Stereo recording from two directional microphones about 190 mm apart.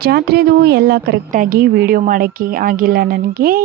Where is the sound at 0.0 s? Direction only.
55° right (ahead or behind).